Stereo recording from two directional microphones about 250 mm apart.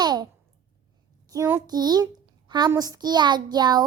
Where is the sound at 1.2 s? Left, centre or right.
Centre.